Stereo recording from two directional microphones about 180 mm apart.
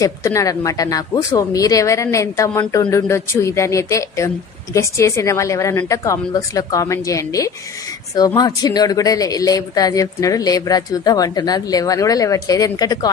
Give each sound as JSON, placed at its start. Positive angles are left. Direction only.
{"t": 0.0, "sound": "speech", "side_deg": 15}